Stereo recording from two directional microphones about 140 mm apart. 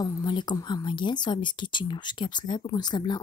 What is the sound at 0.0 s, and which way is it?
Speech, 30° left (ahead or behind).